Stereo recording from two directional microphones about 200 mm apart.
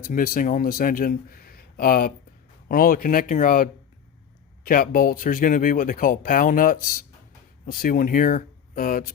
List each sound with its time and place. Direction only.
0.0 s speech: 45° left (ahead or behind)